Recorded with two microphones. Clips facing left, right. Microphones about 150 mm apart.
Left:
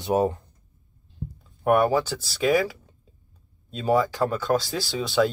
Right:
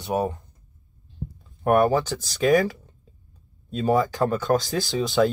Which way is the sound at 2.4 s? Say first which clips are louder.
Right 2 dB; centre (ahead or behind).